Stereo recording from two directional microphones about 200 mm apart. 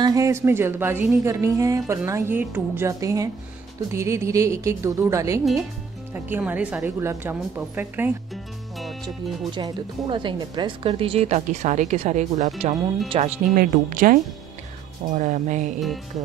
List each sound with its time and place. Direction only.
0.0 s a woman's voice: 15° right (ahead or behind)
5.4 s a woman's voice: centre (ahead or behind)
8.7 s music: centre (ahead or behind)
9.5 s a woman's voice: 25° right (ahead or behind)
13.6 s a woman's voice: 40° right (ahead or behind)